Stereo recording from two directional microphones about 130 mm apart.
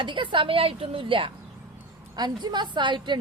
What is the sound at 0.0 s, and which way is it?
Speech, 40° right (ahead or behind).